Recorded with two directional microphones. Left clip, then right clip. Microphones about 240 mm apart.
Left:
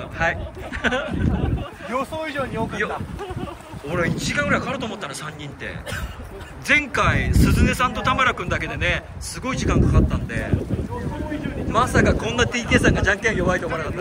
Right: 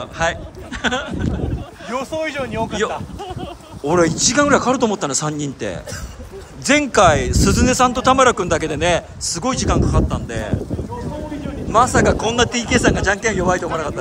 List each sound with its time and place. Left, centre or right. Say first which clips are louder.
0.2 s speech: right 2 dB; centre
1.9 s speech: right 4 dB; right
3.9 s speech: right 8 dB; centre
11.7 s speech: right 5 dB; centre